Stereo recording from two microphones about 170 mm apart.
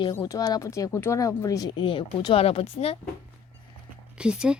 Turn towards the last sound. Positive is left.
turn(degrees=-5)  # may be behind; listen again after turning